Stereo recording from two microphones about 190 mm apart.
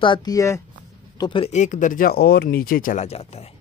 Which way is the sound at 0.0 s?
25° left (ahead or behind).